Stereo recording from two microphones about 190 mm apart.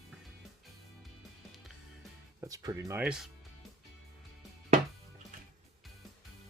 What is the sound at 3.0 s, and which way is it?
Speech, centre (ahead or behind).